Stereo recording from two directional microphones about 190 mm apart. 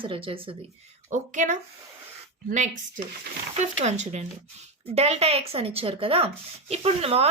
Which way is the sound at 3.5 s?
35° right (ahead or behind).